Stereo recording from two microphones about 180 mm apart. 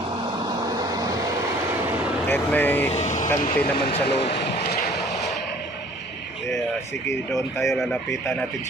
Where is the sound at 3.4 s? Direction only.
60° left (ahead or behind).